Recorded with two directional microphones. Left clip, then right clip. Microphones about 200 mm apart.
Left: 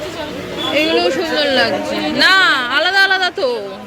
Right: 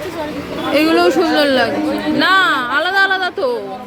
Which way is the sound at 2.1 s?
10° right (ahead or behind).